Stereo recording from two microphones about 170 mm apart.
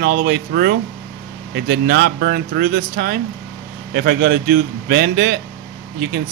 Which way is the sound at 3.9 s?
70° right (ahead or behind).